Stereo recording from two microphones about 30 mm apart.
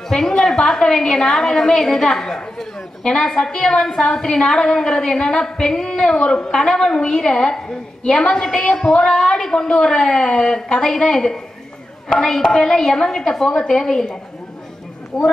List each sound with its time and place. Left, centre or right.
0.1 s a woman's voice: centre
12.6 s a woman's voice: centre
15.1 s a woman's voice: centre